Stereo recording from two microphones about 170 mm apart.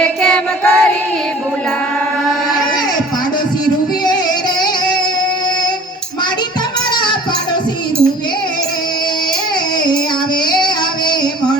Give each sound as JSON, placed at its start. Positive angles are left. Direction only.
{"t": 0.0, "sound": "music", "side_deg": 5}
{"t": 6.9, "sound": "music", "side_deg": 25}